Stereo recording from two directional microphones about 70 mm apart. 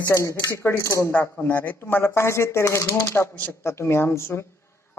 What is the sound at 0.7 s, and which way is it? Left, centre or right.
Speech, left.